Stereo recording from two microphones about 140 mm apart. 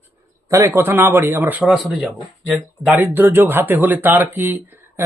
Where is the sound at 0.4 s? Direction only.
20° right (ahead or behind).